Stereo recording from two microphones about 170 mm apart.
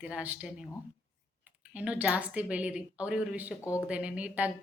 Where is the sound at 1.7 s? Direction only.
10° right (ahead or behind).